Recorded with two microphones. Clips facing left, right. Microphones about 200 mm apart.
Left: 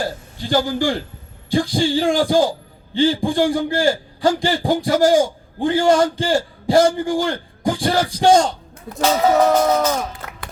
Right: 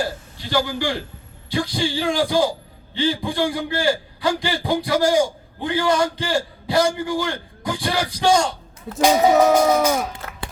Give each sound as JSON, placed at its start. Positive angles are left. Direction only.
{"t": 0.4, "sound": "a man's voice", "side_deg": 45}
{"t": 9.0, "sound": "speech", "side_deg": -15}